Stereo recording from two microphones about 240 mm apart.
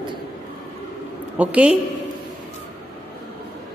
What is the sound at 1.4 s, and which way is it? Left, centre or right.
Speech, centre.